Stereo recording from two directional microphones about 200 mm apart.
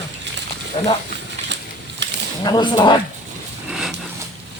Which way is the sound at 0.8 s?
30° left (ahead or behind).